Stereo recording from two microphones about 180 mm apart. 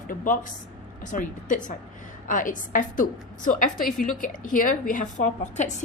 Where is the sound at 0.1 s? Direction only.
50° left (ahead or behind).